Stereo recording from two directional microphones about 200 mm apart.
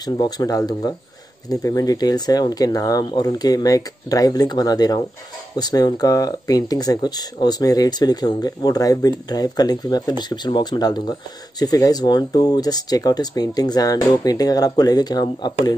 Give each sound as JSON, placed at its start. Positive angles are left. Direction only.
{"t": 0.0, "sound": "speech", "side_deg": 20}